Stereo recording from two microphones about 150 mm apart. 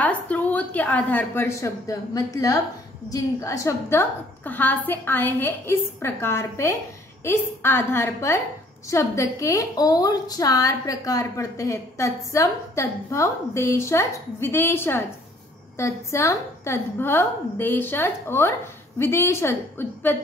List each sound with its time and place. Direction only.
0.0 s a woman's voice: 10° left (ahead or behind)